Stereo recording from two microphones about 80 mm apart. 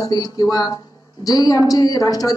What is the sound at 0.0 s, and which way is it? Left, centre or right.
A man's voice, left.